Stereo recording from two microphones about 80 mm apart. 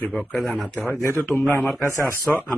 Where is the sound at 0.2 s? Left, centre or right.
Centre.